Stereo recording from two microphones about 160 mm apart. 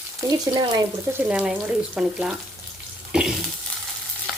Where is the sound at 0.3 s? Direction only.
25° right (ahead or behind).